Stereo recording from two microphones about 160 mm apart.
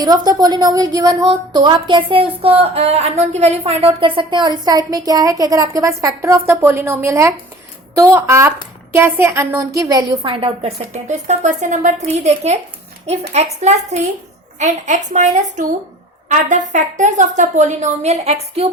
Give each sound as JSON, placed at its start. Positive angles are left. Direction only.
{"t": 0.0, "sound": "a woman's voice", "side_deg": -25}